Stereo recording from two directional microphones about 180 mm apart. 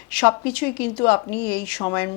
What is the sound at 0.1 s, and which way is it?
Speech, 10° left (ahead or behind).